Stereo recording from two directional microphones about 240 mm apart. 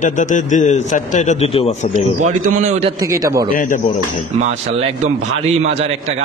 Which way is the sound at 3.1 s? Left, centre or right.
Centre.